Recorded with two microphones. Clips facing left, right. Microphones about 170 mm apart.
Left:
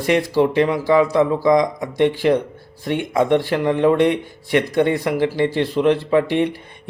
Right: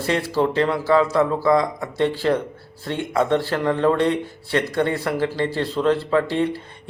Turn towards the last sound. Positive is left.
turn(degrees=15)  # may be behind; listen again after turning